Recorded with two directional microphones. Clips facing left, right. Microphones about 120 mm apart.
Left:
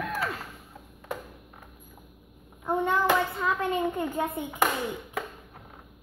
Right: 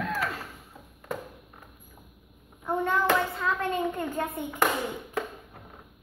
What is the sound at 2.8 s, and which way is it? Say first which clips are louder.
Hands: even; 15° left (ahead or behind).